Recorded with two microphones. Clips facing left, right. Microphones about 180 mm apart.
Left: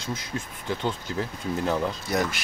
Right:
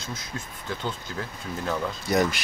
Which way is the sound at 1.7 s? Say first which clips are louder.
Left 1 dB; 20° left (ahead or behind).